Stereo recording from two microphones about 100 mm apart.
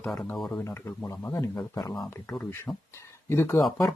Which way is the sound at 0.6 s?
25° left (ahead or behind).